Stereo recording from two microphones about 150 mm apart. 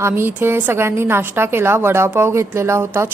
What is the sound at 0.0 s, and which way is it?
A woman's voice, 15° right (ahead or behind).